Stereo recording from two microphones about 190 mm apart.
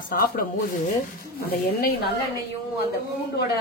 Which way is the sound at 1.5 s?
55° left (ahead or behind).